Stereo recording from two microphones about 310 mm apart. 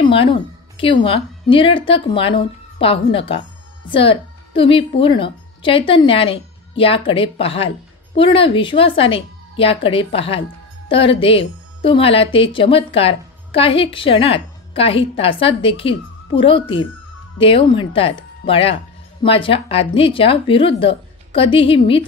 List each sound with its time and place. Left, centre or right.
0.0 s a woman's voice: centre